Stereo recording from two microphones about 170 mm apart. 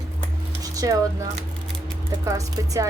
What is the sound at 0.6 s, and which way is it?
Speech, 20° right (ahead or behind).